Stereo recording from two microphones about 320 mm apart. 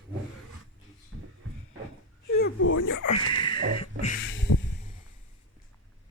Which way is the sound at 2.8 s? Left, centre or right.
Left.